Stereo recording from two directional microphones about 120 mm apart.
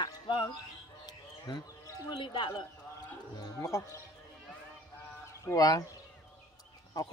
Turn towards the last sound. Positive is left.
turn(degrees=30)  # may be behind; listen again after turning